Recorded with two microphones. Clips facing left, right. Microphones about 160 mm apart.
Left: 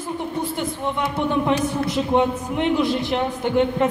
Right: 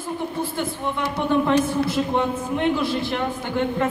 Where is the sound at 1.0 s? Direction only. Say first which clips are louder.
Right 1 dB; 20° left (ahead or behind).